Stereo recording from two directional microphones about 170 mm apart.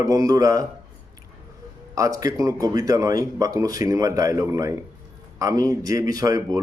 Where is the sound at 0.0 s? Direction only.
20° right (ahead or behind).